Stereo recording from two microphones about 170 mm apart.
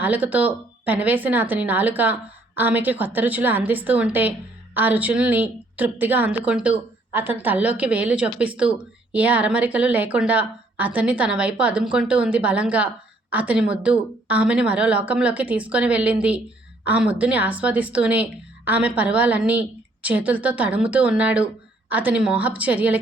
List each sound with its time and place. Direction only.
0.0 s a woman's voice: 10° right (ahead or behind)